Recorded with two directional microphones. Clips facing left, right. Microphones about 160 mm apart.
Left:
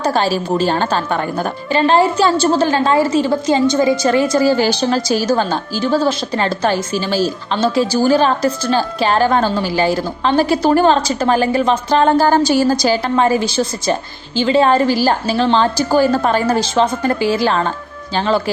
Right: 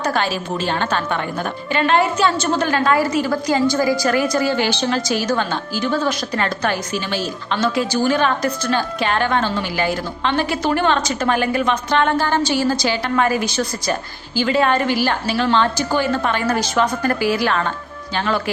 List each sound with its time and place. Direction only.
0.0 s a woman's voice: 30° left (ahead or behind)